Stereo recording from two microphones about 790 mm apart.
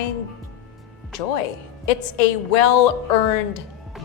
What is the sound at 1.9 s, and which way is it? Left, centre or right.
A woman's voice, left.